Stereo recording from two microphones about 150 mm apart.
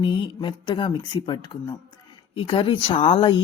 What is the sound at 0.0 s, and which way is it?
Speech, 35° left (ahead or behind).